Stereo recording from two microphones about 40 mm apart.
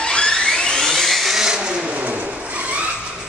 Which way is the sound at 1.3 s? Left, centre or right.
Centre.